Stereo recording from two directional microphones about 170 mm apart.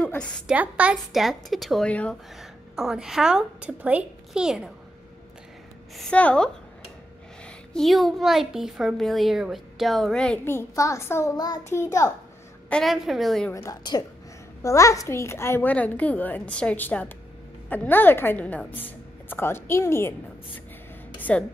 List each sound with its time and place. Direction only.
0.0 s a woman's voice: 5° left (ahead or behind)
0.5 s a woman's voice: 10° right (ahead or behind)
5.9 s a woman's voice: 5° left (ahead or behind)
12.6 s a woman's voice: 5° left (ahead or behind)
13.5 s a woman's voice: 20° left (ahead or behind)
21.2 s a sound: 10° left (ahead or behind)